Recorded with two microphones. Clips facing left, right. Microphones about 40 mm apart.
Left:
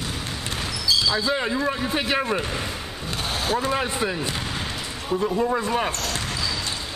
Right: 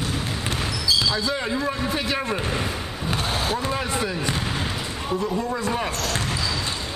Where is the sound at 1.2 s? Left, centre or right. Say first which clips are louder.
Left 1 dB; centre.